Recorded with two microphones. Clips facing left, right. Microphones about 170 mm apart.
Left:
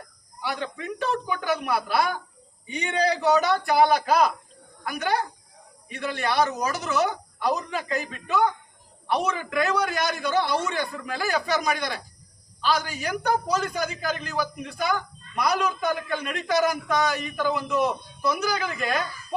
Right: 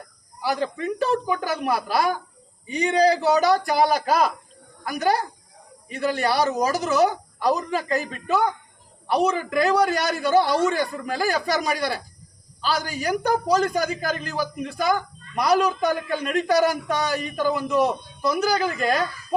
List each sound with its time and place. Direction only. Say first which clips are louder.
0.4 s a man's voice: right 6 dB; 35° right (ahead or behind)
15.4 s a man's voice: right 5 dB; 40° right (ahead or behind)